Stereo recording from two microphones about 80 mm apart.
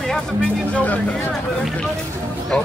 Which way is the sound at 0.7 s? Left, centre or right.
Centre.